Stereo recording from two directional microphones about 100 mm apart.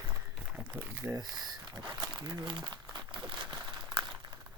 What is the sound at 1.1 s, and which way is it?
Speech, 40° right (ahead or behind).